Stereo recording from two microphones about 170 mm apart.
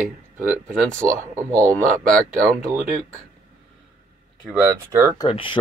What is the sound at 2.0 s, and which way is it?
Speech, 50° right (ahead or behind).